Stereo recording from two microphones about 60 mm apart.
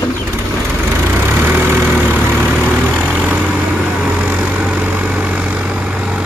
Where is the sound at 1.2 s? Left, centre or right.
Right.